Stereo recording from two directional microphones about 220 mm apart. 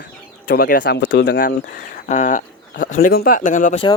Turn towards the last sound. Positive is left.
turn(degrees=35)  # may be behind; listen again after turning